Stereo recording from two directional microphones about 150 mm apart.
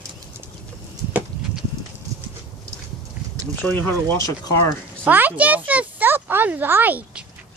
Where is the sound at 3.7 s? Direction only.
15° left (ahead or behind).